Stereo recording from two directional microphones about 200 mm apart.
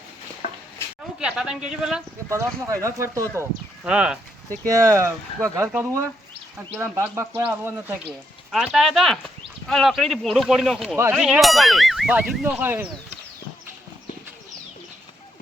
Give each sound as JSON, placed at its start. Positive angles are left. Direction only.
{"t": 1.2, "sound": "speech", "side_deg": -5}
{"t": 2.3, "sound": "speech", "side_deg": -15}
{"t": 4.6, "sound": "speech", "side_deg": -15}
{"t": 8.5, "sound": "speech", "side_deg": 0}